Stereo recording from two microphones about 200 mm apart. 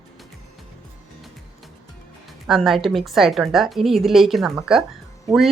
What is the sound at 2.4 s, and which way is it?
A woman's voice, centre (ahead or behind).